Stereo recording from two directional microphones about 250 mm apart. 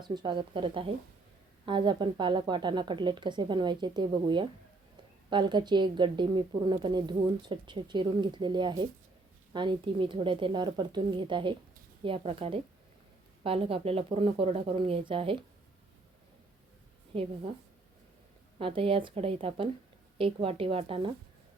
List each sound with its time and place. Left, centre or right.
0.0 s a woman's voice: centre
17.1 s speech: right
18.6 s speech: right